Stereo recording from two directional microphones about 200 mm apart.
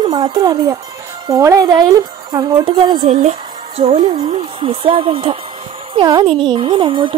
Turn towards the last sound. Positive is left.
turn(degrees=-25)  # may be behind; listen again after turning